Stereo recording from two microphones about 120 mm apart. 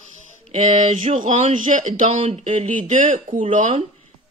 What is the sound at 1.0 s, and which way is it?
Speech, 90° right.